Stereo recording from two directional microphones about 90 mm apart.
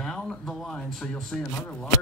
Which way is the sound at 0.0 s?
5° left (ahead or behind).